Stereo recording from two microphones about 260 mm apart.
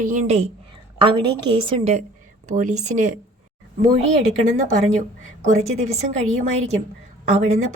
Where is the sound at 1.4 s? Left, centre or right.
Centre.